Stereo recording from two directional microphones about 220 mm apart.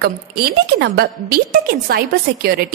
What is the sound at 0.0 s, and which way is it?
A woman's voice, 45° right (ahead or behind).